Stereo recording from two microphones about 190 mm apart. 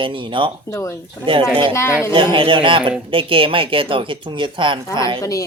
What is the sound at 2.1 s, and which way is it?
Speech, 25° right (ahead or behind).